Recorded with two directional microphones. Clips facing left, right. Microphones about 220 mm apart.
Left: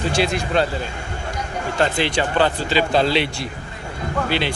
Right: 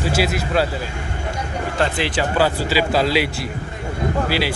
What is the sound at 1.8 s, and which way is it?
Speech, 5° right (ahead or behind).